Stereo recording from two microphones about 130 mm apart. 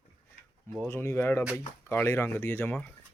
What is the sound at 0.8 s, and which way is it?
Speech, 15° left (ahead or behind).